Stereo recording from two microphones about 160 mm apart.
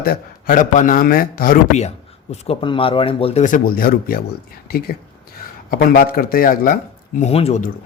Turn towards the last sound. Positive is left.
turn(degrees=40)  # may be behind; listen again after turning